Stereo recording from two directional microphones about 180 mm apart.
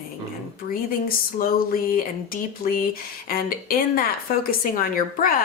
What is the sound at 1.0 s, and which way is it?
A woman's voice, 55° left (ahead or behind).